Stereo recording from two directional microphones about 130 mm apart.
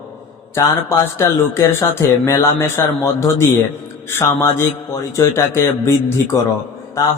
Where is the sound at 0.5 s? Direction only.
20° left (ahead or behind).